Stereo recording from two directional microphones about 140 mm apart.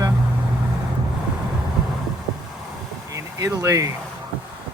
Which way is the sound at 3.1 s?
25° right (ahead or behind).